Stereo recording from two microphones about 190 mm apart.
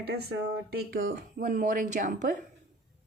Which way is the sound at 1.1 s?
50° right (ahead or behind).